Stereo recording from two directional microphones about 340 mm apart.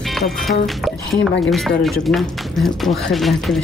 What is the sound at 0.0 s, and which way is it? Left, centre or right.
A woman's voice, centre.